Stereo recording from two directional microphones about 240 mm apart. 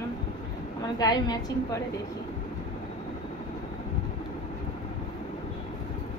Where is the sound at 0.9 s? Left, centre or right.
Centre.